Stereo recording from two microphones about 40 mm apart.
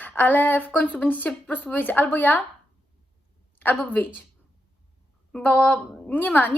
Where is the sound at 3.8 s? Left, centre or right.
Left.